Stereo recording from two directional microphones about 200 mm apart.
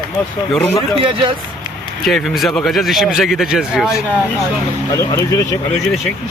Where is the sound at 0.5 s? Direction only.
Centre (ahead or behind).